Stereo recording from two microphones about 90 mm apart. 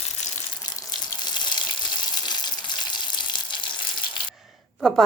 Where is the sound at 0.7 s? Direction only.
50° left (ahead or behind).